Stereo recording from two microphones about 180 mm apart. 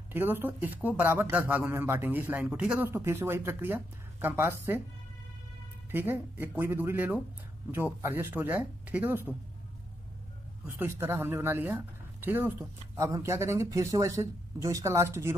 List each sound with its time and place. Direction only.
0.1 s speech: 10° right (ahead or behind)
5.9 s speech: 10° right (ahead or behind)
10.8 s speech: 15° right (ahead or behind)